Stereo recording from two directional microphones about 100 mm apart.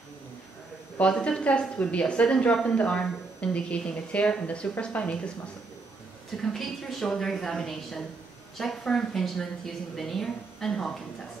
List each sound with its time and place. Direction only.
0.9 s a woman's voice: 10° left (ahead or behind)
6.4 s a woman's voice: 5° left (ahead or behind)